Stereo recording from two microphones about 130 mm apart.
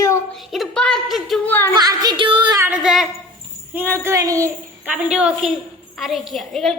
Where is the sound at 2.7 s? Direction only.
Centre (ahead or behind).